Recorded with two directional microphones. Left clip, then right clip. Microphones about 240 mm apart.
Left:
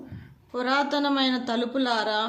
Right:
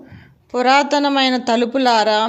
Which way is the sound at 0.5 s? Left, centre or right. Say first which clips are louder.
Right 11 dB; right.